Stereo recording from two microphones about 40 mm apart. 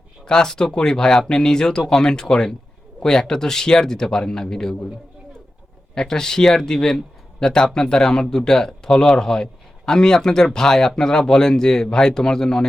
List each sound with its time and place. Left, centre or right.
0.3 s speech: centre
5.9 s speech: centre